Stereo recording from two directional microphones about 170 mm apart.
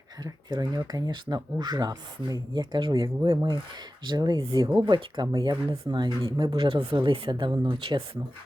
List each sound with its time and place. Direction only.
0.3 s speech: 20° right (ahead or behind)